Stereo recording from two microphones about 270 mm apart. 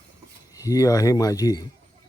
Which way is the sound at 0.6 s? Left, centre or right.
Centre.